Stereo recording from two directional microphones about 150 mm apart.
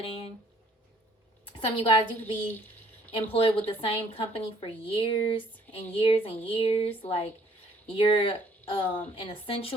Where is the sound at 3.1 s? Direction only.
35° left (ahead or behind).